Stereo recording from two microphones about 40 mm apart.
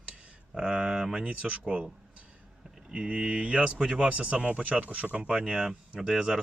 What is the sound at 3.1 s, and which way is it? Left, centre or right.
Speech, right.